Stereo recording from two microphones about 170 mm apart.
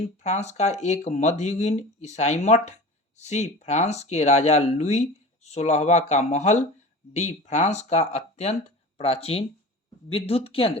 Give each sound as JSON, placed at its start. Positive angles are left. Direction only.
{"t": 0.2, "sound": "speech", "side_deg": 40}